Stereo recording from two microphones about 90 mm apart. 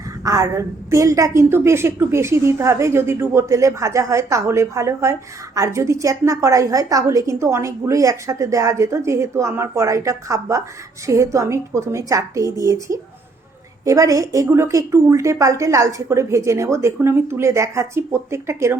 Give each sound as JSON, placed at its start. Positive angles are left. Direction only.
{"t": 0.3, "sound": "a woman's voice", "side_deg": -35}